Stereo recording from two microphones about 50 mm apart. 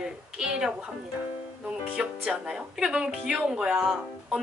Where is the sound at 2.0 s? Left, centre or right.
Centre.